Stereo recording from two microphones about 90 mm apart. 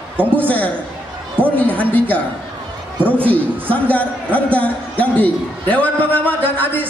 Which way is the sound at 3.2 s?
15° left (ahead or behind).